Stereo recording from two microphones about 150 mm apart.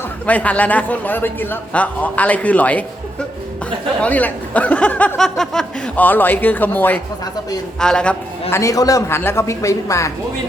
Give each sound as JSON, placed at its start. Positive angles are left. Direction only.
{"t": 0.3, "sound": "speech", "side_deg": 10}
{"t": 4.0, "sound": "a man's voice", "side_deg": 10}
{"t": 8.4, "sound": "a woman's voice", "side_deg": 20}